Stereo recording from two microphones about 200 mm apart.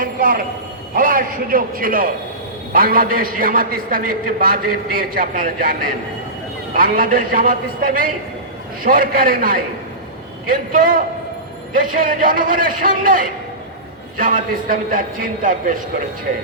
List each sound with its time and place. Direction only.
0.0 s a sound: 45° right (ahead or behind)
0.9 s a man's voice: 45° right (ahead or behind)
10.7 s a man's voice: 45° right (ahead or behind)